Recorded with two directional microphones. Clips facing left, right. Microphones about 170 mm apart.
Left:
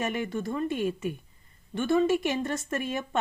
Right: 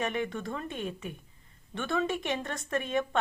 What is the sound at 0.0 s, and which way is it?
Speech, 5° left (ahead or behind).